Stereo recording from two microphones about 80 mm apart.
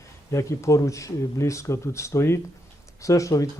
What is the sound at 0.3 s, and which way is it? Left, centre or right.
A man's voice, left.